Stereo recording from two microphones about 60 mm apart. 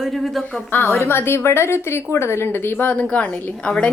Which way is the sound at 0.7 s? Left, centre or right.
Left.